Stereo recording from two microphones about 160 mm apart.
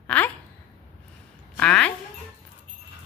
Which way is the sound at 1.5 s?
5° left (ahead or behind).